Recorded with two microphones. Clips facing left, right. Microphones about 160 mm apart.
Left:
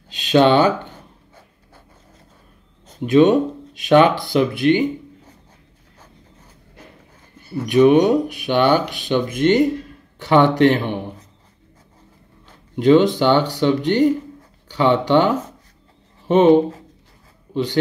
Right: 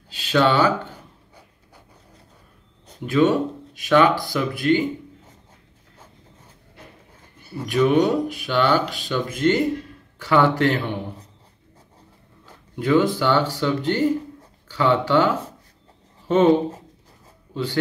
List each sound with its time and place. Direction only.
0.1 s speech: 20° left (ahead or behind)
3.0 s speech: 20° left (ahead or behind)
7.6 s speech: 15° left (ahead or behind)
12.7 s speech: 20° left (ahead or behind)